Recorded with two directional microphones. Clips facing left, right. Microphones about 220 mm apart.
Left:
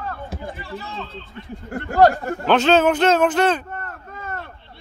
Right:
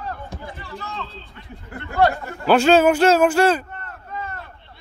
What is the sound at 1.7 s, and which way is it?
Speech, 45° left (ahead or behind).